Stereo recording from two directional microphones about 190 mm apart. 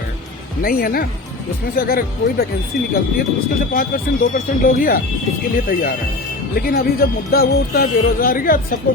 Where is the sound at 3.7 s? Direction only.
50° left (ahead or behind).